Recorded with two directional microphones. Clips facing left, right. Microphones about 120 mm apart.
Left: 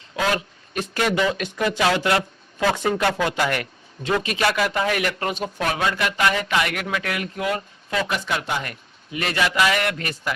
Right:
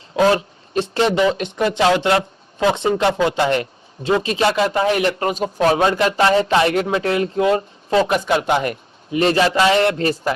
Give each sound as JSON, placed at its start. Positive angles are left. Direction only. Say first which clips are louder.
{"t": 0.2, "sound": "speech", "louder": "right 8 dB", "side_deg": -30}